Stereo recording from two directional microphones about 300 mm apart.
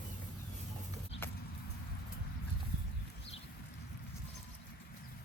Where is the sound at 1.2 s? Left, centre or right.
Centre.